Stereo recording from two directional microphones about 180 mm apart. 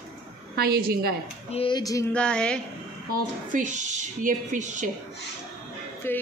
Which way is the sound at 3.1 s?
45° right (ahead or behind).